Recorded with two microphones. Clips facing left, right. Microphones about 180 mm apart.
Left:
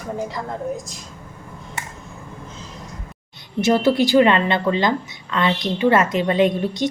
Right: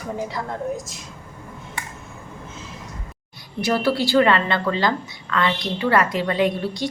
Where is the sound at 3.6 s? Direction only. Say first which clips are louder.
Left 4 dB; 20° left (ahead or behind).